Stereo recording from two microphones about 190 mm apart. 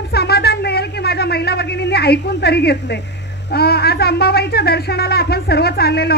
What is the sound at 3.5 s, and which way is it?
Speech, 55° left (ahead or behind).